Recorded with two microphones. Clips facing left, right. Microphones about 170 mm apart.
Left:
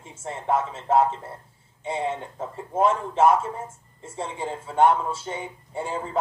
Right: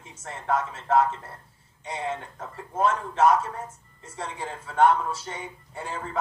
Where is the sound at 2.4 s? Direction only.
25° left (ahead or behind).